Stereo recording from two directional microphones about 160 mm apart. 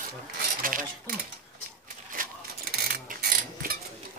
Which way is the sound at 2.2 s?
60° right (ahead or behind).